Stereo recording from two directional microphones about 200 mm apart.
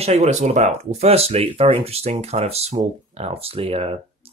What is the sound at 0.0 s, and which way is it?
Speech, 35° right (ahead or behind).